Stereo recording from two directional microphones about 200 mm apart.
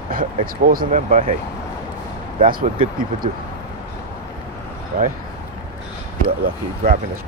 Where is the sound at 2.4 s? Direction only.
45° right (ahead or behind).